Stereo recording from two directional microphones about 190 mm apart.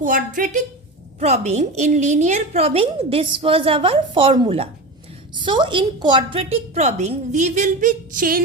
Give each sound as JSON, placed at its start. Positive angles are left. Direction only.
{"t": 0.0, "sound": "a woman's voice", "side_deg": -45}